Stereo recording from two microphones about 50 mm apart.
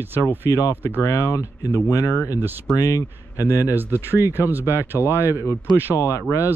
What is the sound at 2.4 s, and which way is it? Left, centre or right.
Speech, right.